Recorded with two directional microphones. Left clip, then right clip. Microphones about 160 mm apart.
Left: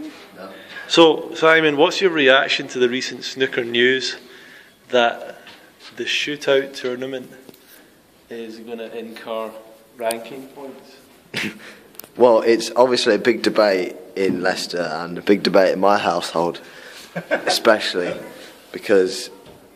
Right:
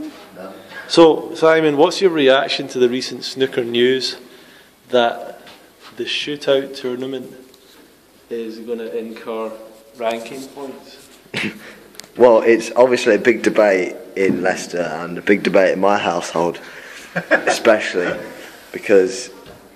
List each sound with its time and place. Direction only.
0.9 s speech: 5° right (ahead or behind)
4.9 s a sound: centre (ahead or behind)
5.9 s a man's voice: 15° left (ahead or behind)
8.3 s speech: 40° left (ahead or behind); by 9.5 s 60° left (ahead or behind)
10.0 s a man's voice: 25° left (ahead or behind)
11.3 s a sound: centre (ahead or behind)
12.0 s a man's voice: 10° left (ahead or behind)